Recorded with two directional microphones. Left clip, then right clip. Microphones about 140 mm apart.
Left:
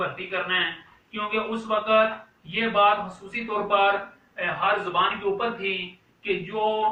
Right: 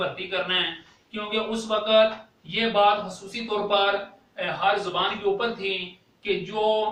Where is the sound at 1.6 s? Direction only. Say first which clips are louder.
Right 1 dB; 35° right (ahead or behind).